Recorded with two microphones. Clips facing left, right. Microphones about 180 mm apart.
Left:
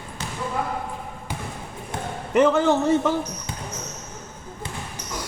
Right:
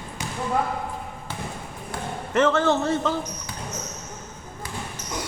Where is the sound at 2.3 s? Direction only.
15° left (ahead or behind).